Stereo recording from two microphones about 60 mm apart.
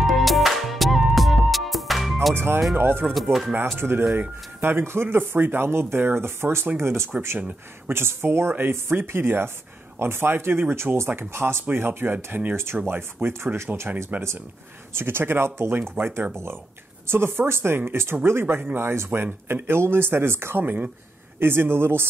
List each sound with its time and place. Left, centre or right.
0.0 s music: centre
2.3 s speech: right
3.3 s speech: centre
3.7 s speech: right
12.8 s speech: right
19.0 s speech: right
19.4 s speech: right
20.6 s speech: right